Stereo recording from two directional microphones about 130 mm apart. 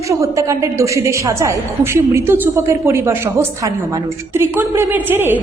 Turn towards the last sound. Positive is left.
turn(degrees=-15)  # may be behind; listen again after turning